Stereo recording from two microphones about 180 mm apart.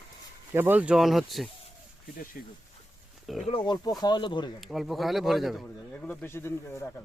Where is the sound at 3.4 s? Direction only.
25° left (ahead or behind).